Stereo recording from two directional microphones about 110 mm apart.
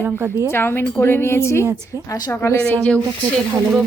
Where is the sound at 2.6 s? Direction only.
10° left (ahead or behind).